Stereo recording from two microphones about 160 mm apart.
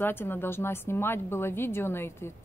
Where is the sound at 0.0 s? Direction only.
15° left (ahead or behind).